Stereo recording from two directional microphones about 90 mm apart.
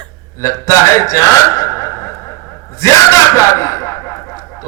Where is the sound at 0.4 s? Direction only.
35° left (ahead or behind).